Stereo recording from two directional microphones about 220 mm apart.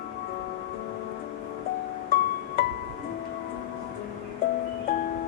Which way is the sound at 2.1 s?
40° left (ahead or behind).